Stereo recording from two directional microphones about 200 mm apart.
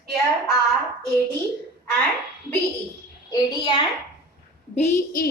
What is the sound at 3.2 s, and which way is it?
Speech, 20° left (ahead or behind).